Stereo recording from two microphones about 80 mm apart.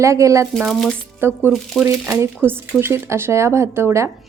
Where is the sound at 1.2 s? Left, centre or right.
Right.